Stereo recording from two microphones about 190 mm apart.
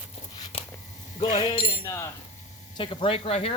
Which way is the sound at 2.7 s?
25° left (ahead or behind).